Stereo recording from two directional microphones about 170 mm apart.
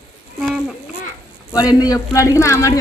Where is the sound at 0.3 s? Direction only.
Centre (ahead or behind).